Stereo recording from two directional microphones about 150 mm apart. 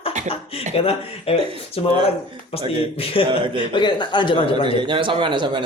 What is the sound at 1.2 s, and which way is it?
Speech, 40° left (ahead or behind).